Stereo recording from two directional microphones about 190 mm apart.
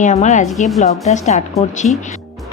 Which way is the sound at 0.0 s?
35° left (ahead or behind).